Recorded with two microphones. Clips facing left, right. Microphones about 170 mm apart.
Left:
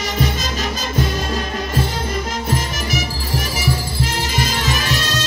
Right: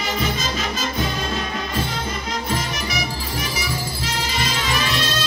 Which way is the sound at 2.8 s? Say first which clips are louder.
Left 3 dB; 45° left (ahead or behind).